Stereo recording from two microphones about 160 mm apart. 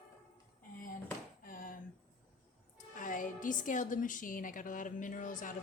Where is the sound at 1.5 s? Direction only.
60° left (ahead or behind).